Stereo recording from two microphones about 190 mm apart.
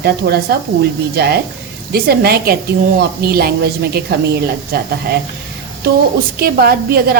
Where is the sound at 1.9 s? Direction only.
55° right (ahead or behind).